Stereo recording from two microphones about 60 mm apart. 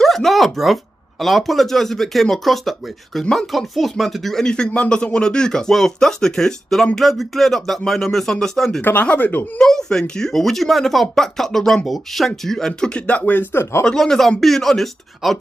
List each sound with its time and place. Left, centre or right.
0.0 s speech: centre
9.0 s speech: left
9.6 s speech: centre; by 13.8 s left
13.8 s speech: centre